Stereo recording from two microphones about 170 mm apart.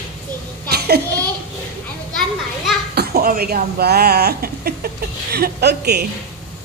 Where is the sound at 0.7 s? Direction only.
70° right (ahead or behind).